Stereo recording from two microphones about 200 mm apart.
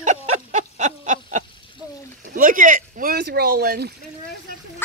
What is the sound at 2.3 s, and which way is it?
Speech, 40° right (ahead or behind).